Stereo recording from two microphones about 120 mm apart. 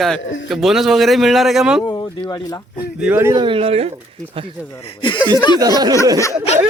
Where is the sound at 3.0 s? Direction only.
15° right (ahead or behind).